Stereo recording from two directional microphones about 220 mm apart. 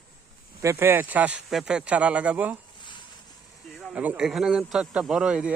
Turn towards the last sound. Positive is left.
turn(degrees=-5)  # may be behind; listen again after turning